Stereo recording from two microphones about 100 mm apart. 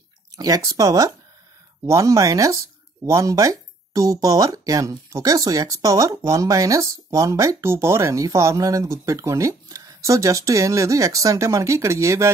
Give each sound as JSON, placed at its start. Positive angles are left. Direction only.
{"t": 0.4, "sound": "speech", "side_deg": -35}